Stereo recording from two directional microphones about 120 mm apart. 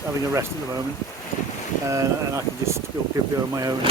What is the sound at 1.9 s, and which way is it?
Speech, 25° right (ahead or behind).